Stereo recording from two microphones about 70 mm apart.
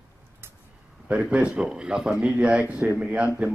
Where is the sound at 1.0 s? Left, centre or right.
Centre.